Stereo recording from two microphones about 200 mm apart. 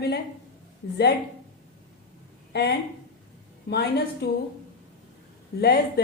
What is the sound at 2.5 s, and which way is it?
A woman's voice, 55° left (ahead or behind).